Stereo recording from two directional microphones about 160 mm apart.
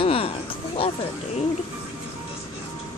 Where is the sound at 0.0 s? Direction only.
35° left (ahead or behind).